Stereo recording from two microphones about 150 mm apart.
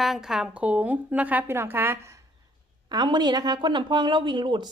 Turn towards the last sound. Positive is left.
turn(degrees=-30)  # may be behind; listen again after turning